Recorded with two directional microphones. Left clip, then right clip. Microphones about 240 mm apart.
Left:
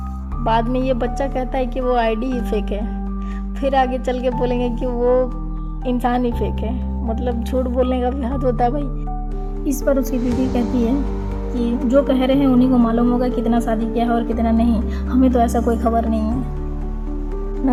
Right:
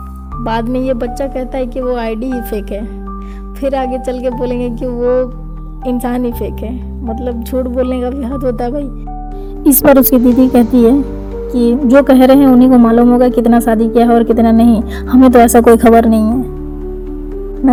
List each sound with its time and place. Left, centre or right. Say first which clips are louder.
0.4 s speech: right 3 dB; right
10.0 s a woman's voice: right 12 dB; right